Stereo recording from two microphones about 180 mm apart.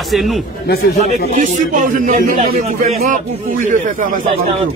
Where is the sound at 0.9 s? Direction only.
40° right (ahead or behind).